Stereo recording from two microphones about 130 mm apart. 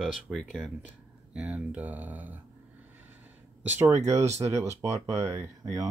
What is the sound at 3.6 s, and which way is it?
Speech, 15° right (ahead or behind).